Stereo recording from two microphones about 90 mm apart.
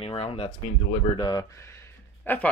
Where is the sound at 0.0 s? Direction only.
85° left.